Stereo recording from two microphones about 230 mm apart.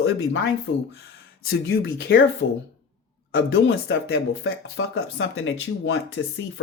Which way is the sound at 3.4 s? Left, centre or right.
Left.